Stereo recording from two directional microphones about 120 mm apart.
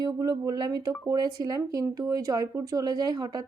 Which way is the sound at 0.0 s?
30° right (ahead or behind).